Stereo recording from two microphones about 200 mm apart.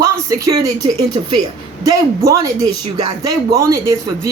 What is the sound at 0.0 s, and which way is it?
Speech, 15° right (ahead or behind).